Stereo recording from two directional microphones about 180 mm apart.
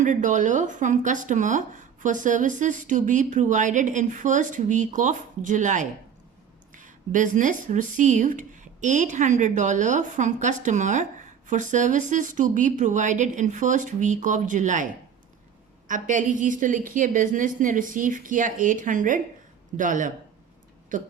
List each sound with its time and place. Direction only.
0.0 s speech: 45° right (ahead or behind)
15.9 s speech: 45° right (ahead or behind)